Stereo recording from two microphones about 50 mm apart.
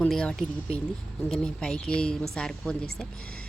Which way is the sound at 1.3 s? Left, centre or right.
Centre.